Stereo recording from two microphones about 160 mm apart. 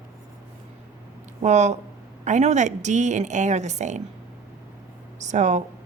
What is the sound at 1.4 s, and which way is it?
Speech, 45° right (ahead or behind).